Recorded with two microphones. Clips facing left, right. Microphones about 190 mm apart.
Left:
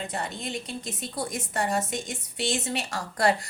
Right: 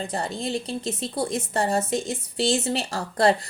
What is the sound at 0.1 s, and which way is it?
A woman's voice, 35° right (ahead or behind).